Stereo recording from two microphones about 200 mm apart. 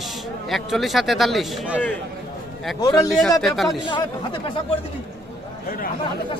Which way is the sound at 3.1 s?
Centre (ahead or behind).